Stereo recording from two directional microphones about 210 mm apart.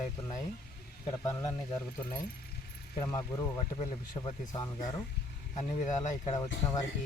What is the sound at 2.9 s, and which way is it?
Speech, 15° left (ahead or behind).